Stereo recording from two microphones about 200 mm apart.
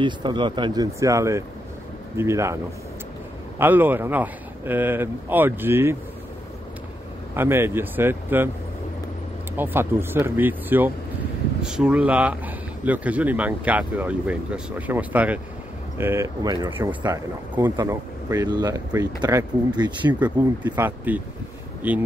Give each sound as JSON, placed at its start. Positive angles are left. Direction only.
{"t": 0.0, "sound": "speech", "side_deg": -25}
{"t": 7.3, "sound": "speech", "side_deg": -10}
{"t": 9.6, "sound": "speech", "side_deg": -10}
{"t": 20.1, "sound": "speech", "side_deg": -10}